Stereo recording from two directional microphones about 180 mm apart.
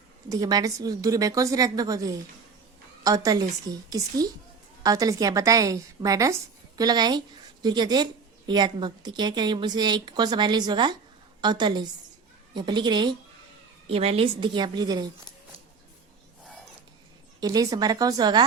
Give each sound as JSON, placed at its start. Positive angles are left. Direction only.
{"t": 0.3, "sound": "a woman's voice", "side_deg": -20}
{"t": 17.4, "sound": "a woman's voice", "side_deg": -20}